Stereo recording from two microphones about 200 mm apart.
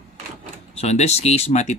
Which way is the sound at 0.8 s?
35° left (ahead or behind).